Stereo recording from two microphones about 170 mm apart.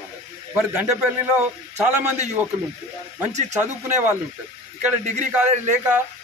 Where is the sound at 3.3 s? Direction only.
45° right (ahead or behind).